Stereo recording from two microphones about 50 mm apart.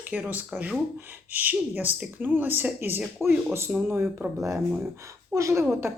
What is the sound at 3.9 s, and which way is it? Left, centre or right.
Speech, right.